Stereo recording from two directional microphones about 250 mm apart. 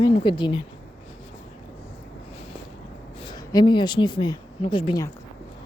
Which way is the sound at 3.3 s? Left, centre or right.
Centre.